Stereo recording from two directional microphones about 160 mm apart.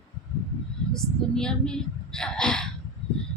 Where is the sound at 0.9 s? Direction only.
5° left (ahead or behind).